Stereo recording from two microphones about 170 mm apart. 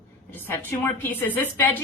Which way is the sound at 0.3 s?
10° left (ahead or behind).